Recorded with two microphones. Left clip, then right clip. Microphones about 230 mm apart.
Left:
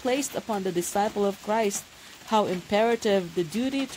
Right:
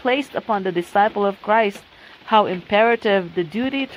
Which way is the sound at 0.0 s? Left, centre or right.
Centre.